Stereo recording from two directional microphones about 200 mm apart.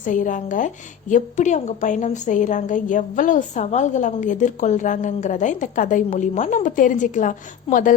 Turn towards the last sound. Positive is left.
turn(degrees=40)  # may be behind; listen again after turning